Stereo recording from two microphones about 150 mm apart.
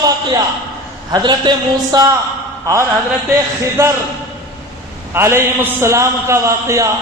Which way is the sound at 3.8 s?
15° right (ahead or behind).